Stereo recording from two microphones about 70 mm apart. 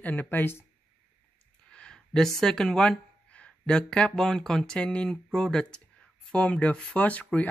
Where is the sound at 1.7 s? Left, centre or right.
Centre.